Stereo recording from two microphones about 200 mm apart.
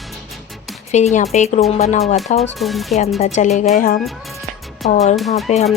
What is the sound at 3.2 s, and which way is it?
Speech, 35° left (ahead or behind).